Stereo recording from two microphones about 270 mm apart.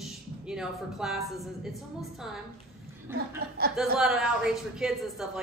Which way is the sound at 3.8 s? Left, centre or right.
Centre.